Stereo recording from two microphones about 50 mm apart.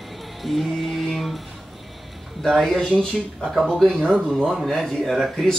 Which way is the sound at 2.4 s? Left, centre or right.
Centre.